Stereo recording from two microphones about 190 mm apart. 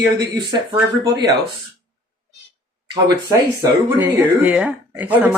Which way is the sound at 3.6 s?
10° right (ahead or behind).